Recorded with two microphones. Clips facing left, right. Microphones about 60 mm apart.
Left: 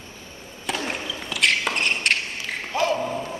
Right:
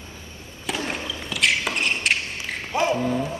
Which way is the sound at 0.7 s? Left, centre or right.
Centre.